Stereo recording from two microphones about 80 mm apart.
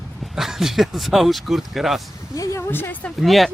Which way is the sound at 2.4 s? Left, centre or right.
Left.